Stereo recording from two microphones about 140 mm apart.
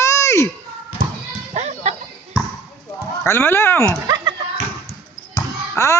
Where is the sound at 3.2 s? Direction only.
15° left (ahead or behind).